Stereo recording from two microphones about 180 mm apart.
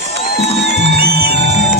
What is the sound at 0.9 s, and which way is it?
Music, 60° right (ahead or behind).